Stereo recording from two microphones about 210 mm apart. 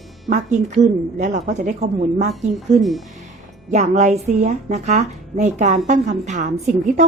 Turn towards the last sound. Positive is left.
turn(degrees=-35)  # may be behind; listen again after turning